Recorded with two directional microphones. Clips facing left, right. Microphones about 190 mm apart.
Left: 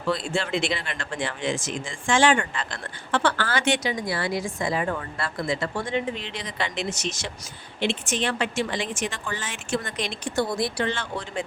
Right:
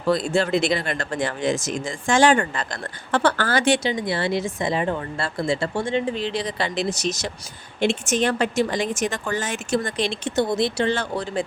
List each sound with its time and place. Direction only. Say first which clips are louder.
0.0 s a woman's voice: right 6 dB; 40° right (ahead or behind); by 10.9 s 25° right (ahead or behind)
10.9 s a woman's voice: right 6 dB; 40° right (ahead or behind)